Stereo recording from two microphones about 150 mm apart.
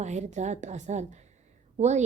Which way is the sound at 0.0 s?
50° right (ahead or behind).